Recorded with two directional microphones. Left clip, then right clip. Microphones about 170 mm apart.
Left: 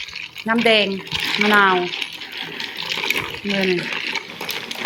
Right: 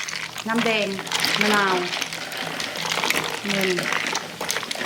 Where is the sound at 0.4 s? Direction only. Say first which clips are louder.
Left 7 dB; 35° left (ahead or behind).